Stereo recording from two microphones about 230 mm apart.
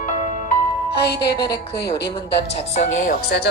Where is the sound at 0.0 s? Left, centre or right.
Left.